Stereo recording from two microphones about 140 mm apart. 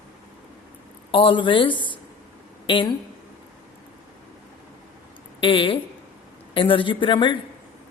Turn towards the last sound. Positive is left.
turn(degrees=35)  # may be behind; listen again after turning